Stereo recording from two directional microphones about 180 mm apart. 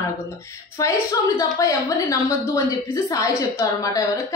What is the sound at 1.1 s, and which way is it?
A woman's voice, 20° left (ahead or behind).